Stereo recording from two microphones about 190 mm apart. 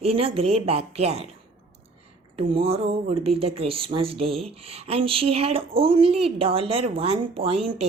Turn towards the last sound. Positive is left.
turn(degrees=-30)  # may be behind; listen again after turning